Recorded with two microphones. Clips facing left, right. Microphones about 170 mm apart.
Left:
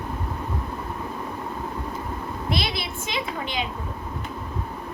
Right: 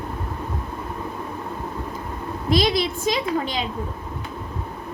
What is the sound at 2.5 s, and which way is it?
A woman's voice, 40° right (ahead or behind).